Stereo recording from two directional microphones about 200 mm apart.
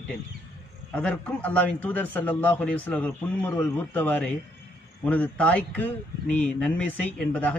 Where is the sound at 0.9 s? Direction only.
5° left (ahead or behind).